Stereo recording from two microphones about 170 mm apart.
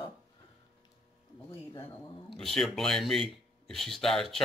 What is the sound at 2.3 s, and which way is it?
Speech, centre (ahead or behind).